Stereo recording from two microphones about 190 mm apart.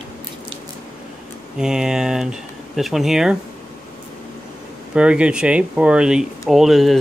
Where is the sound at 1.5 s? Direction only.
5° right (ahead or behind).